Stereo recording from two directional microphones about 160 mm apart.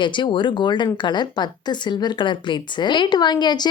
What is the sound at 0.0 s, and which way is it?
Speech, 30° left (ahead or behind).